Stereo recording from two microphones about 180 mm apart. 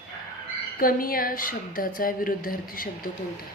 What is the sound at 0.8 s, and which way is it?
A woman's voice, 50° left (ahead or behind).